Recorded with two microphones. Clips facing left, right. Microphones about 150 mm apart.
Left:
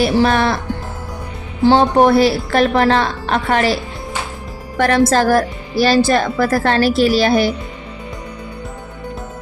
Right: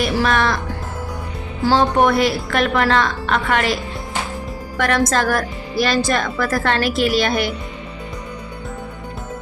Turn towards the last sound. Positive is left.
turn(degrees=30)  # may be behind; listen again after turning